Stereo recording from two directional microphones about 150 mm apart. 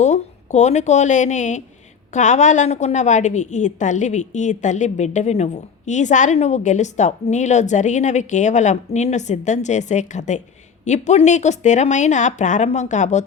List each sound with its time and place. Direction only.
0.0 s a woman's voice: 50° left (ahead or behind)